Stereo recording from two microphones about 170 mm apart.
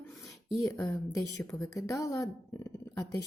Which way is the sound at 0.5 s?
20° left (ahead or behind).